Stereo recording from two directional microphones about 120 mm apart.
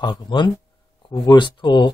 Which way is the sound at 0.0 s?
40° left (ahead or behind).